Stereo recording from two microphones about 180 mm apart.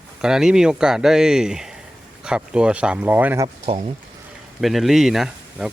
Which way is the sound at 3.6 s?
35° right (ahead or behind).